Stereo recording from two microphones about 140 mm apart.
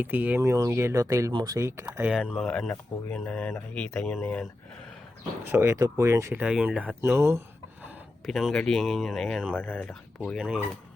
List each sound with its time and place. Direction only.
0.0 s speech: 10° right (ahead or behind)
2.0 s speech: 5° right (ahead or behind)
2.5 s speech: 10° left (ahead or behind)
5.5 s speech: 15° right (ahead or behind)
6.4 s speech: 10° right (ahead or behind)
7.0 s a sound: 15° right (ahead or behind)
8.3 s speech: centre (ahead or behind)